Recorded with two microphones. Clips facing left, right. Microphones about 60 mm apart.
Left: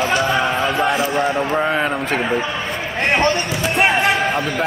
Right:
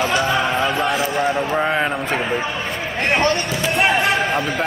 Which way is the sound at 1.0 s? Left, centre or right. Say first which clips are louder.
Left 1 dB; left.